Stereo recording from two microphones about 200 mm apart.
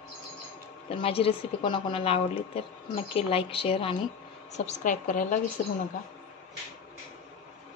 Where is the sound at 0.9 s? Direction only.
30° left (ahead or behind).